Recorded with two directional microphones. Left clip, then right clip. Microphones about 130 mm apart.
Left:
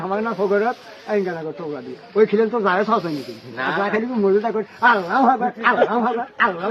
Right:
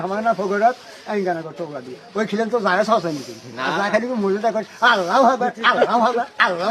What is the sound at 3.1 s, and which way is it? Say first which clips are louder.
Speech: right 1 dB; 25° right (ahead or behind).